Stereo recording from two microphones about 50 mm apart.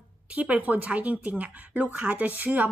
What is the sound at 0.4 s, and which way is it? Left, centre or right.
A woman's voice, right.